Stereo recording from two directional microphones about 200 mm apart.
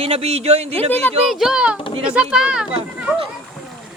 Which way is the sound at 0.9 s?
10° left (ahead or behind).